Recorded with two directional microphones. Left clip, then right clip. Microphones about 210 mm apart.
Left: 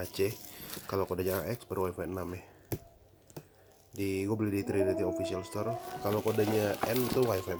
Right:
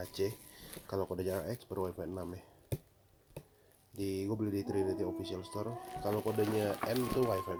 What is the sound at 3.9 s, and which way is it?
Speech, 10° left (ahead or behind).